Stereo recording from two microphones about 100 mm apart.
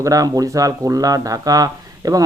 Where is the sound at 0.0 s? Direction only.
35° right (ahead or behind).